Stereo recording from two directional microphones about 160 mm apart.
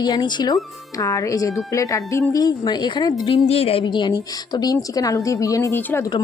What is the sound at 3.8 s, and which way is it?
A woman's voice, 25° left (ahead or behind).